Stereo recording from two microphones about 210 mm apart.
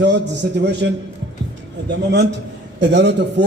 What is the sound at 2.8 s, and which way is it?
Speech, 55° right (ahead or behind).